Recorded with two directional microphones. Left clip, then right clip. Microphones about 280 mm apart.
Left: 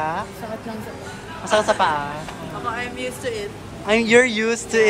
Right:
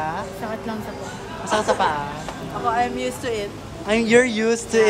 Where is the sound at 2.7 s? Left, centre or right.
Right.